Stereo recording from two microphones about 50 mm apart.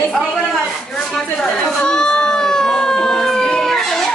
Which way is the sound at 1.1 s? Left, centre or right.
Centre.